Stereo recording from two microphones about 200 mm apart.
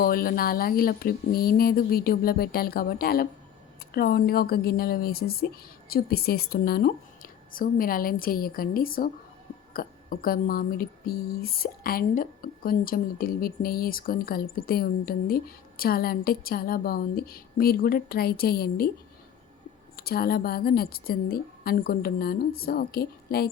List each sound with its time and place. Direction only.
0.0 s speech: 45° left (ahead or behind)
20.0 s speech: 50° left (ahead or behind)